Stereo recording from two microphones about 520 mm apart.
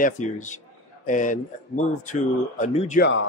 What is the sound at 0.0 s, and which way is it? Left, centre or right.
Speech, centre.